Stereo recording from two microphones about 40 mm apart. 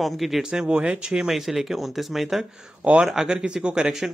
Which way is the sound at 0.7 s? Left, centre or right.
Right.